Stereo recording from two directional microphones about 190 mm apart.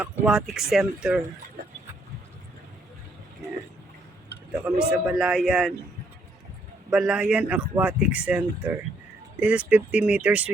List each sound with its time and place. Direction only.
0.0 s speech: centre (ahead or behind)
4.5 s speech: 5° right (ahead or behind)
6.9 s speech: 5° right (ahead or behind)